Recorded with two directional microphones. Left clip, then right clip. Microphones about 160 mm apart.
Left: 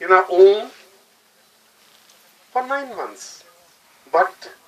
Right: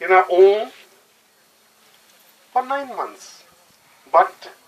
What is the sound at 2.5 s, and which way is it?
Speech, 55° left (ahead or behind).